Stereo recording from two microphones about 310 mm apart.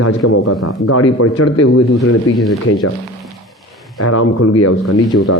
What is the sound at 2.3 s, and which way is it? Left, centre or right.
Speech, centre.